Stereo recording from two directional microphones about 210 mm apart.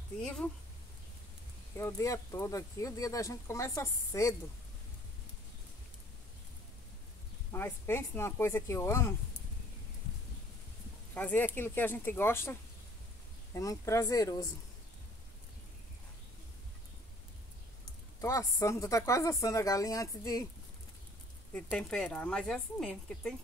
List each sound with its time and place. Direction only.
0.2 s speech: 5° left (ahead or behind)
1.8 s speech: 15° left (ahead or behind)
7.5 s speech: 10° left (ahead or behind)
11.1 s speech: 10° left (ahead or behind)
18.2 s speech: 15° left (ahead or behind)
21.5 s speech: 5° left (ahead or behind)